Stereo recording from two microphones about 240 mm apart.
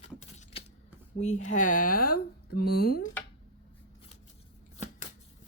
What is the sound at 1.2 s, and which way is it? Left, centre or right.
Speech, left.